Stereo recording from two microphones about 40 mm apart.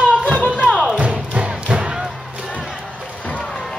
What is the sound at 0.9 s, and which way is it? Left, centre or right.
Music, right.